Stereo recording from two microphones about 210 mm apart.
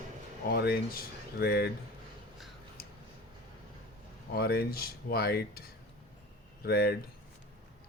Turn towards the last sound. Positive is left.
turn(degrees=50)  # may be behind; listen again after turning